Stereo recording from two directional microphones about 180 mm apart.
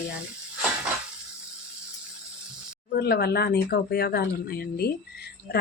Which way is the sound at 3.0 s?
60° left (ahead or behind).